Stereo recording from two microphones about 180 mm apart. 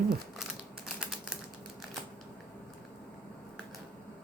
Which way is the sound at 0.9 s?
5° right (ahead or behind).